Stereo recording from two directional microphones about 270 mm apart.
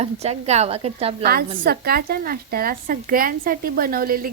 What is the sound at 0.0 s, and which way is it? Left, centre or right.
A woman's voice, right.